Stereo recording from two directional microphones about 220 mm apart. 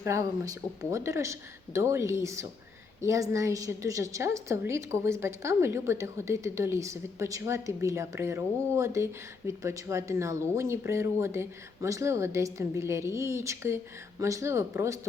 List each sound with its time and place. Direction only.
0.0 s a woman's voice: 15° right (ahead or behind)